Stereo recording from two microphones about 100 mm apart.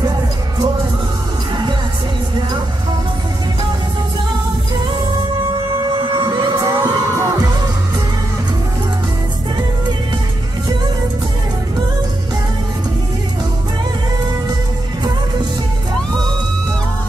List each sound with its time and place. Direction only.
6.2 s music: 45° right (ahead or behind)